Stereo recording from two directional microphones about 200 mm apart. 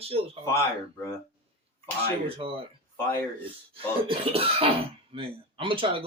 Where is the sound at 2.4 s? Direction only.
25° right (ahead or behind).